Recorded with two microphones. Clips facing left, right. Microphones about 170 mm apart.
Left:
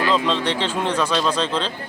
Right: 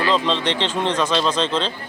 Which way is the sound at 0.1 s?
5° left (ahead or behind).